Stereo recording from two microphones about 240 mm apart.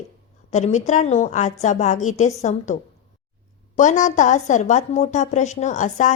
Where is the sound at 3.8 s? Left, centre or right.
Left.